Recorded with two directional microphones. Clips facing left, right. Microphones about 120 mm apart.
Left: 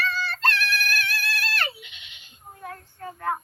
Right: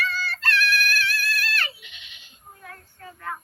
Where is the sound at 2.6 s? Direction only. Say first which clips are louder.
Left 7 dB; 40° left (ahead or behind).